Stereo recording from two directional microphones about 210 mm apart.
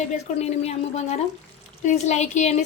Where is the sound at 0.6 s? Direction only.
30° left (ahead or behind).